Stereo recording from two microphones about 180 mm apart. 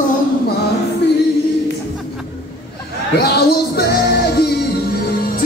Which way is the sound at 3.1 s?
65° left (ahead or behind).